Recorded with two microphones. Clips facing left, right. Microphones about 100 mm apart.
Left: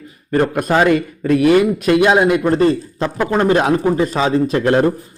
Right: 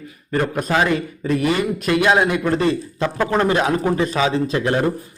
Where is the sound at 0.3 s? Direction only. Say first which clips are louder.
Left 5 dB; 40° left (ahead or behind).